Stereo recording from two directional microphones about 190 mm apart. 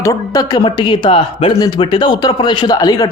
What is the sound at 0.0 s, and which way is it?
Speech, 20° left (ahead or behind).